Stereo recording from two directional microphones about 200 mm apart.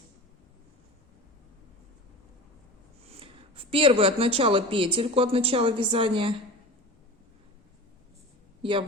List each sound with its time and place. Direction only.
3.1 s speech: 30° right (ahead or behind)